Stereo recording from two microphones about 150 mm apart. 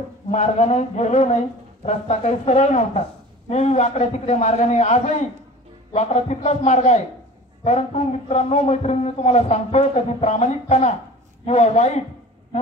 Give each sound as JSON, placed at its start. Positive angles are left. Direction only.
{"t": 0.3, "sound": "a man's voice", "side_deg": 50}